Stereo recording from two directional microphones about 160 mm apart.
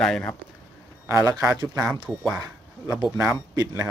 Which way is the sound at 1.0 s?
20° right (ahead or behind).